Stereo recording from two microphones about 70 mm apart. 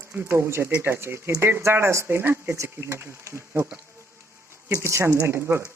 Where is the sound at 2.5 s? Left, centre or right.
Right.